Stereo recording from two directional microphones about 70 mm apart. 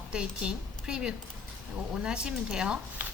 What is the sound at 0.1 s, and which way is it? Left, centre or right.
Speech, centre.